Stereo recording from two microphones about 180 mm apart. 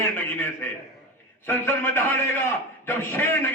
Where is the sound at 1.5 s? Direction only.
15° left (ahead or behind).